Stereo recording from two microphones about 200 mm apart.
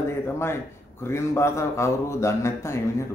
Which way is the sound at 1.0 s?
15° left (ahead or behind).